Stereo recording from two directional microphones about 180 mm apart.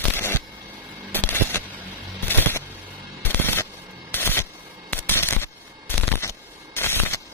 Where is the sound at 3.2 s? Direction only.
10° left (ahead or behind).